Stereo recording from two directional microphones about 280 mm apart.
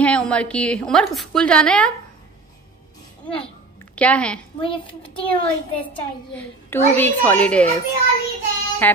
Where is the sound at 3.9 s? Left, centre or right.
Centre.